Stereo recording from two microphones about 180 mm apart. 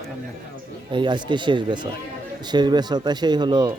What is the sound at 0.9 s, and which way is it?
Speech, 25° right (ahead or behind).